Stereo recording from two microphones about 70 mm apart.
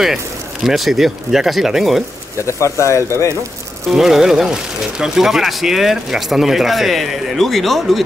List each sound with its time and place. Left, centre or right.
0.7 s speech: centre
2.8 s speech: left
3.9 s speech: centre